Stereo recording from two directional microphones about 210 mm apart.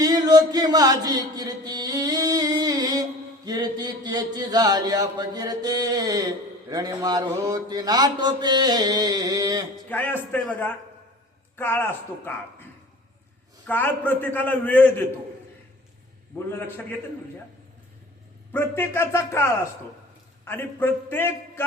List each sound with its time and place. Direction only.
0.0 s mantra: 20° right (ahead or behind)
9.9 s a man's voice: 10° left (ahead or behind)
13.7 s a man's voice: 10° left (ahead or behind)
16.5 s a man's voice: 10° left (ahead or behind)
18.5 s a man's voice: 10° left (ahead or behind)